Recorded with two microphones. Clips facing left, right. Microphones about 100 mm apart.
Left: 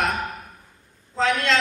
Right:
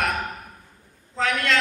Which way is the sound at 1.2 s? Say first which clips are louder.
Left 2 dB; 25° left (ahead or behind).